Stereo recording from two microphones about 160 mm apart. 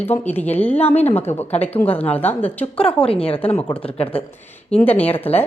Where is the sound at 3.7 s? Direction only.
25° left (ahead or behind).